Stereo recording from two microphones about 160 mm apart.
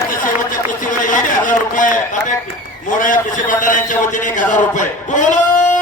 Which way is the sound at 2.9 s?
55° left (ahead or behind).